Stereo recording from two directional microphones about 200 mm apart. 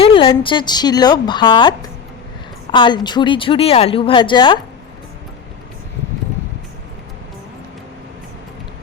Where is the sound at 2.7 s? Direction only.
20° left (ahead or behind).